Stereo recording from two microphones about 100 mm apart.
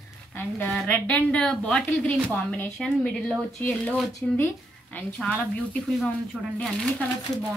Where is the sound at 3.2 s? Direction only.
15° left (ahead or behind).